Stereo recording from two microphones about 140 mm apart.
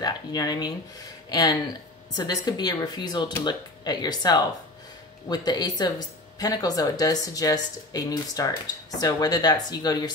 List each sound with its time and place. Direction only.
0.0 s speech: 30° left (ahead or behind)